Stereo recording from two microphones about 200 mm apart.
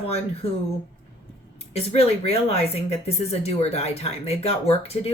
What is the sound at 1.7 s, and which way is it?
Speech, 30° left (ahead or behind).